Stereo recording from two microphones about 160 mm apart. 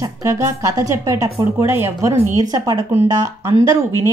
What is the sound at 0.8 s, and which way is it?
A woman's voice, 20° right (ahead or behind).